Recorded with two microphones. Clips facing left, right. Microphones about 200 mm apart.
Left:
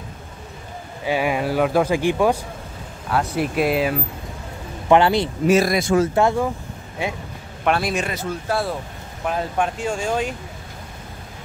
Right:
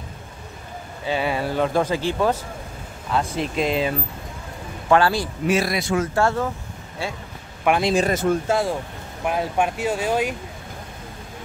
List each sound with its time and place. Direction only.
1.0 s speech: 10° left (ahead or behind)
4.8 s speech: 20° left (ahead or behind)
5.5 s speech: 45° left (ahead or behind)
6.1 s speech: 15° left (ahead or behind)
7.8 s speech: 30° right (ahead or behind)
8.1 s speech: 50° right (ahead or behind)
8.5 s speech: 15° right (ahead or behind)